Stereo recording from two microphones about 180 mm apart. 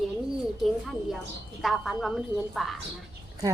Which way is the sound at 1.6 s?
Centre (ahead or behind).